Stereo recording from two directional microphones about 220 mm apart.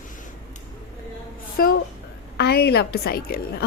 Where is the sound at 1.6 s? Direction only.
40° left (ahead or behind).